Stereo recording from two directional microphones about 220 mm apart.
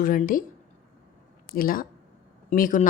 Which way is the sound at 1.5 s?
40° left (ahead or behind).